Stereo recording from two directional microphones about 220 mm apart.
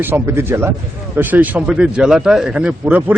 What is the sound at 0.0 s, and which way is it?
Speech, 10° right (ahead or behind).